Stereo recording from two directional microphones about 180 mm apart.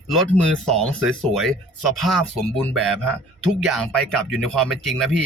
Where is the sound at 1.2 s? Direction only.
Centre (ahead or behind).